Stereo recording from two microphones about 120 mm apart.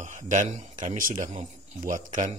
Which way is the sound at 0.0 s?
90° right.